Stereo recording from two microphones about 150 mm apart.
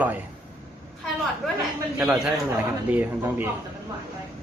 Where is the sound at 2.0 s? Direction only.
10° right (ahead or behind).